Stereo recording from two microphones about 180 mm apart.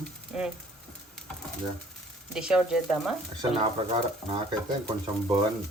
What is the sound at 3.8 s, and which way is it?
Speech, 30° right (ahead or behind).